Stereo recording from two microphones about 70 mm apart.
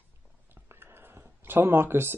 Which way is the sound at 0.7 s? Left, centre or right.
Right.